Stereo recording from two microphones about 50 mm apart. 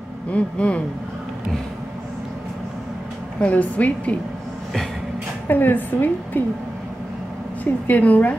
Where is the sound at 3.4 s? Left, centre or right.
Left.